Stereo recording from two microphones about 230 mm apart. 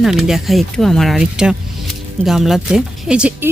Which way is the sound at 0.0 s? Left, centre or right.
Centre.